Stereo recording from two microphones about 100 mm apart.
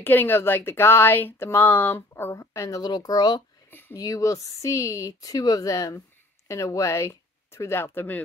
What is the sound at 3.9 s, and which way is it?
Speech, 35° left (ahead or behind).